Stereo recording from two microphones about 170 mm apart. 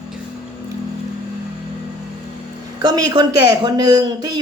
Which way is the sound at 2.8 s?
25° right (ahead or behind).